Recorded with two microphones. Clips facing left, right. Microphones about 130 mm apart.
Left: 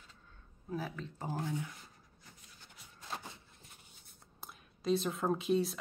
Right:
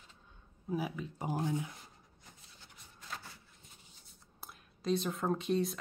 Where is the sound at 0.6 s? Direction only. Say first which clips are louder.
Right 3 dB; 10° right (ahead or behind).